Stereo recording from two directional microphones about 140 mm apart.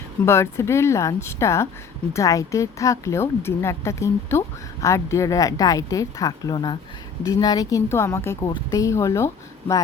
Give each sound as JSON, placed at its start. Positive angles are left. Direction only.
{"t": 0.3, "sound": "speech", "side_deg": 20}